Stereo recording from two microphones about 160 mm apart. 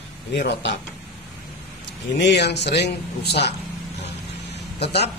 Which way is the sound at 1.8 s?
90° left.